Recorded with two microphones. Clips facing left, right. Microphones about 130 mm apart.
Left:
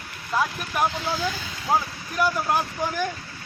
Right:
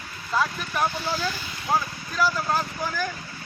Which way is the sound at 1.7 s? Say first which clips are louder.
Left 2 dB; 20° left (ahead or behind).